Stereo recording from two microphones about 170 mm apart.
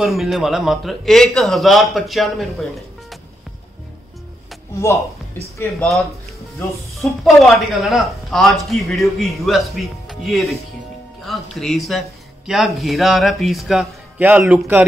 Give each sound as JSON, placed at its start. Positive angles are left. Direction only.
{"t": 0.0, "sound": "speech", "side_deg": 0}
{"t": 4.8, "sound": "speech", "side_deg": 15}
{"t": 5.6, "sound": "speech", "side_deg": 5}